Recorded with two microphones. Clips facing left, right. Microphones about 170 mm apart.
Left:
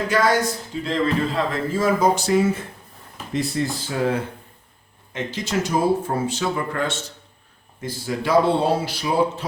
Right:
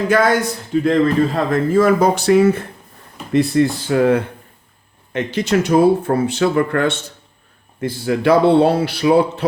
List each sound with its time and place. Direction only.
0.1 s speech: 55° right (ahead or behind)